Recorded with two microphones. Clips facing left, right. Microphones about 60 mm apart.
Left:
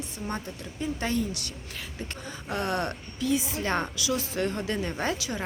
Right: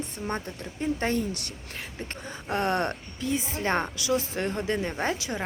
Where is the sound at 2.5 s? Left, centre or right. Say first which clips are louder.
Right 3 dB; right.